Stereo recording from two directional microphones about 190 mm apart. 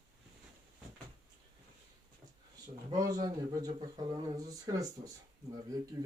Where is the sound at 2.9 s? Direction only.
20° right (ahead or behind).